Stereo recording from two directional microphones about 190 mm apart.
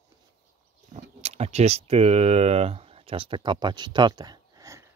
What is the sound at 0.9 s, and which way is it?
Speech, 35° right (ahead or behind).